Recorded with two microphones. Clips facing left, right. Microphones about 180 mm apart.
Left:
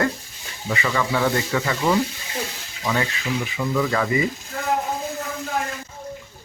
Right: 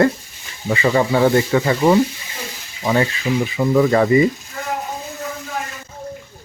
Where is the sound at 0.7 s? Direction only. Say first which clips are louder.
Right 7 dB; 30° right (ahead or behind).